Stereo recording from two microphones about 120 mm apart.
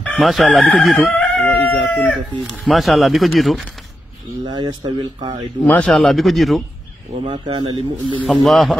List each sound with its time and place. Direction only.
0.0 s chicken: 10° left (ahead or behind)
0.3 s speech: centre (ahead or behind)
2.6 s speech: centre (ahead or behind)
4.5 s speech: 40° right (ahead or behind)
5.7 s speech: 10° left (ahead or behind)
7.4 s speech: 40° right (ahead or behind)
8.3 s speech: centre (ahead or behind)